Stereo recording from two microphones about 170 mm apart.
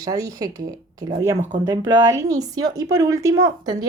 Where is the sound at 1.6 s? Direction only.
20° right (ahead or behind).